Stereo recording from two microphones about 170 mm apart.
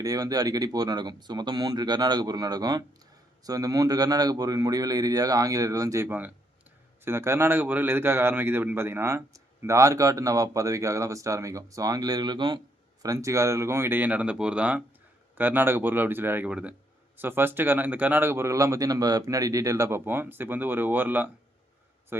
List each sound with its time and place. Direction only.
0.0 s a man's voice: 20° right (ahead or behind)